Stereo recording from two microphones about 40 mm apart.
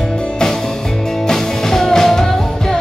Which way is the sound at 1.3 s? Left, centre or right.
Centre.